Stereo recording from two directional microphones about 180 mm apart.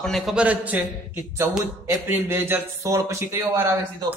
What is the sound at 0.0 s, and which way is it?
Speech, centre (ahead or behind).